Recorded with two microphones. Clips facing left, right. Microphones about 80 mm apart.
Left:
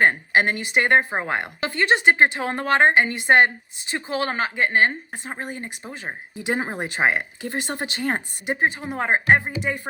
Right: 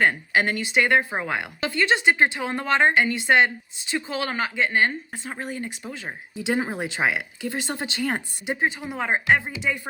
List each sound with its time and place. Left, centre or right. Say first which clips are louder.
0.0 s a woman's voice: left 2 dB; left